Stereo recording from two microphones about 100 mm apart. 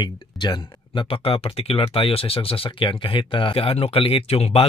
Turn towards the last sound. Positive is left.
turn(degrees=85)